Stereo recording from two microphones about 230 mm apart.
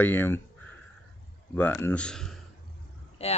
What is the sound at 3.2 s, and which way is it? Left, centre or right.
Speech, left.